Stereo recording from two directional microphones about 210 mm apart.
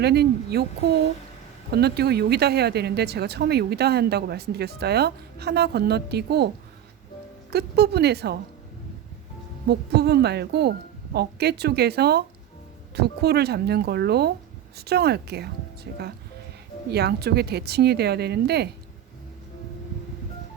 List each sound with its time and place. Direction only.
0.0 s speech: 50° right (ahead or behind)
7.5 s speech: 50° right (ahead or behind)
9.6 s speech: 50° right (ahead or behind)